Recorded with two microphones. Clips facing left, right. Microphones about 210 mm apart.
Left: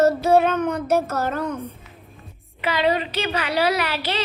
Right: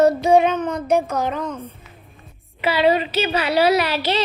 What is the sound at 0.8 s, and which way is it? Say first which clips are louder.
Music: right 4 dB; 5° left (ahead or behind).